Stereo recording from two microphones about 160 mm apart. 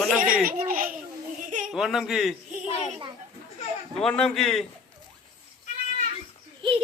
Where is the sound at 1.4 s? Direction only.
50° right (ahead or behind).